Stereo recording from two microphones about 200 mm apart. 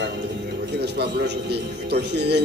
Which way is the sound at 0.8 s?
55° right (ahead or behind).